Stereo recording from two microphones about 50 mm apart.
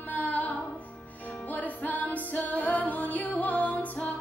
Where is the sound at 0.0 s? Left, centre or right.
Left.